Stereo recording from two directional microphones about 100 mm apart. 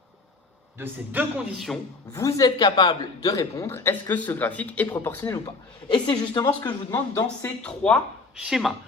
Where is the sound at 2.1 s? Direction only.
35° left (ahead or behind); by 4.9 s 15° left (ahead or behind).